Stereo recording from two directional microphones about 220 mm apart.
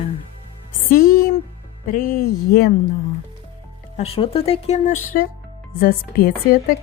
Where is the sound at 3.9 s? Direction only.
25° left (ahead or behind); by 6.7 s 45° left (ahead or behind).